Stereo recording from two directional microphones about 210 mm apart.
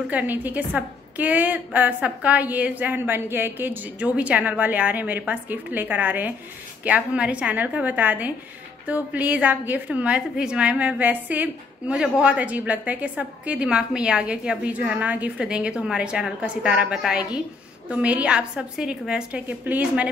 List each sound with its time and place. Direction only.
0.1 s a woman's voice: 10° right (ahead or behind)